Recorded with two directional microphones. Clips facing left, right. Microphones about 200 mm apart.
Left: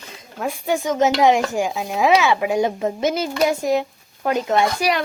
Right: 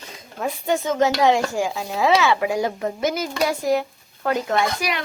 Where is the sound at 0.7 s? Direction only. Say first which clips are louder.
Left 1 dB; 15° left (ahead or behind).